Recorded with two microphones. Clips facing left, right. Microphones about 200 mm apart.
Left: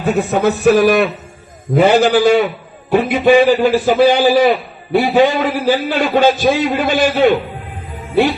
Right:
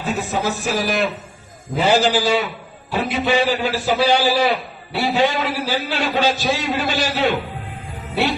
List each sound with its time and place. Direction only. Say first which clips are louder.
0.0 s a man's voice: left 8 dB; 60° left (ahead or behind)